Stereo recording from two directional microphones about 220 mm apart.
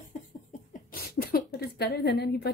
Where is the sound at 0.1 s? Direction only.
40° left (ahead or behind).